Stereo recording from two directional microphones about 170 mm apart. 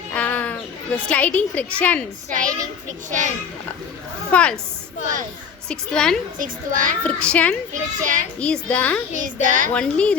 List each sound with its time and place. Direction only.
0.1 s a sound: 10° left (ahead or behind)
2.3 s a child's voice: 50° right (ahead or behind)
4.3 s a woman's voice: 5° left (ahead or behind)
5.6 s a woman's voice: 5° left (ahead or behind)
6.4 s a child's voice: 50° right (ahead or behind)
7.0 s a child's voice: 5° left (ahead or behind)
7.7 s a child's voice: 50° right (ahead or behind)
8.4 s a child's voice: 5° left (ahead or behind)
9.1 s a child's voice: 50° right (ahead or behind)
9.7 s a child's voice: 5° left (ahead or behind)